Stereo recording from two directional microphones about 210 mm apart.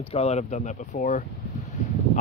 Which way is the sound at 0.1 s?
30° left (ahead or behind).